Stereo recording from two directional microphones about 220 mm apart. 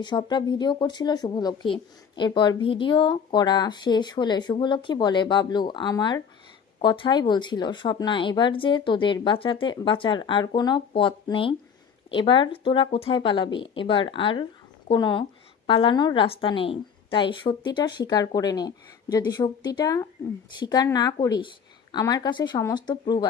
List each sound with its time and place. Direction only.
0.0 s speech: 20° left (ahead or behind)